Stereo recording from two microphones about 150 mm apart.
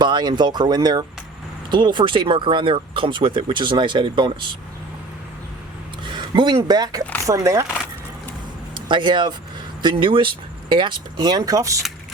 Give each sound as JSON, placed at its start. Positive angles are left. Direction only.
{"t": 0.0, "sound": "speech", "side_deg": -30}
{"t": 6.1, "sound": "speech", "side_deg": -30}
{"t": 8.7, "sound": "speech", "side_deg": -30}